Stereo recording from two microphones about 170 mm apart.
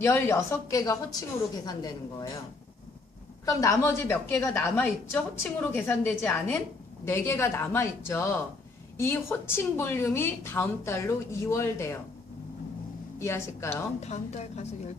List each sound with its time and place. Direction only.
0.0 s a woman's voice: 15° left (ahead or behind)
3.4 s a woman's voice: 20° left (ahead or behind)
13.1 s a woman's voice: 15° left (ahead or behind)
14.0 s a woman's voice: 40° left (ahead or behind)